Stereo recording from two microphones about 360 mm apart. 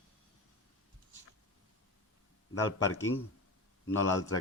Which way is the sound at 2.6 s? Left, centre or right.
Left.